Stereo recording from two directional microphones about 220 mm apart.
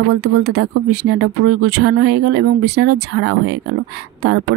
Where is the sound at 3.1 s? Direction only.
80° right.